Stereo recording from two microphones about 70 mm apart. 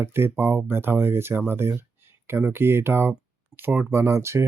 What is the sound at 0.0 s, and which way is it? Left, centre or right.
Speech, right.